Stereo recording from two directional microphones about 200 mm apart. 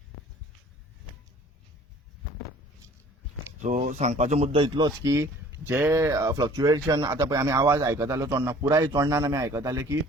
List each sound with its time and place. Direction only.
3.6 s speech: 40° right (ahead or behind); by 10.0 s 15° right (ahead or behind)